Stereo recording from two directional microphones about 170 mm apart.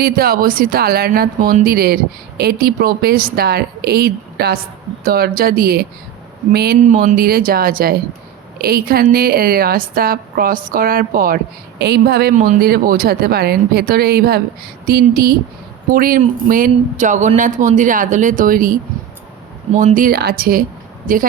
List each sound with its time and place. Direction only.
0.0 s a woman's voice: 60° right (ahead or behind)
6.8 s a woman's voice: 45° right (ahead or behind)
11.8 s a woman's voice: 70° right (ahead or behind)
12.3 s speech: 45° right (ahead or behind)
12.6 s a woman's voice: 60° right (ahead or behind)